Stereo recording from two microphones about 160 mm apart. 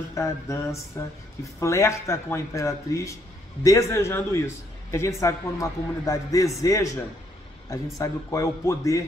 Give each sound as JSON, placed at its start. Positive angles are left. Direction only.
{"t": 0.1, "sound": "a man's voice", "side_deg": 20}